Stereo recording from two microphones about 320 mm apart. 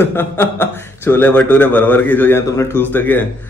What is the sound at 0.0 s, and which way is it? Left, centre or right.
A man's voice, centre.